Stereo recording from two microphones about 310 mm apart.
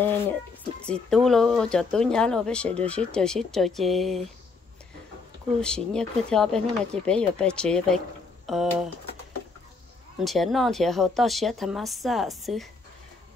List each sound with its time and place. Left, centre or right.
0.8 s speech: centre
5.6 s speech: centre
10.1 s speech: centre